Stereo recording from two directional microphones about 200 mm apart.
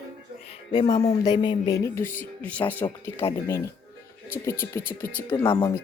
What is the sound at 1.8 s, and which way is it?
Speech, 15° left (ahead or behind).